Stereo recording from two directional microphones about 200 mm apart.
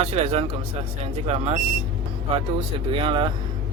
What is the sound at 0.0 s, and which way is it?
Speech, 30° right (ahead or behind).